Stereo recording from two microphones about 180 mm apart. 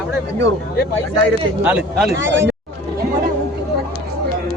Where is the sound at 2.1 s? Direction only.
90° right.